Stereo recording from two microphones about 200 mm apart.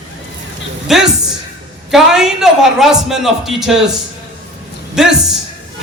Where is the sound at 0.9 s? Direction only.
Centre (ahead or behind).